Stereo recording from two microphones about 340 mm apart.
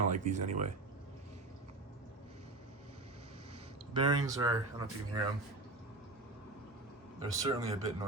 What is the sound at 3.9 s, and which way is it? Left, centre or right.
Speech, centre.